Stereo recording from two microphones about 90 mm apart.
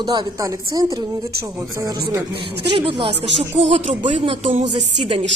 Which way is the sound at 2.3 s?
75° right (ahead or behind).